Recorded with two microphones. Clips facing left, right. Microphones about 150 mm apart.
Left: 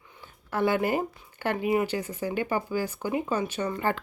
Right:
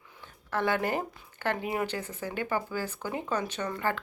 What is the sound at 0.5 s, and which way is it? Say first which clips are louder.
Speech: left 3 dB; 10° left (ahead or behind).